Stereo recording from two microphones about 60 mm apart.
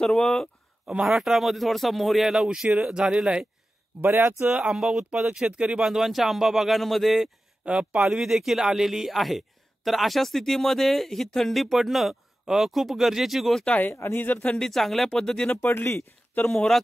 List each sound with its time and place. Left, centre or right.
0.0 s speech: centre
1.0 s speech: centre
4.0 s speech: right
4.5 s speech: centre
13.7 s speech: left
13.9 s speech: left
14.2 s speech: left
14.5 s speech: centre
15.6 s speech: left
16.5 s speech: centre